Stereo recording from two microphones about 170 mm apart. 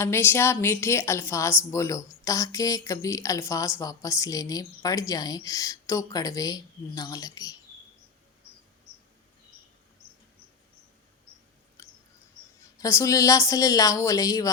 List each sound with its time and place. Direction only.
0.0 s a woman's voice: 15° left (ahead or behind)
11.8 s a sound: 20° left (ahead or behind)
12.8 s a woman's voice: 20° left (ahead or behind)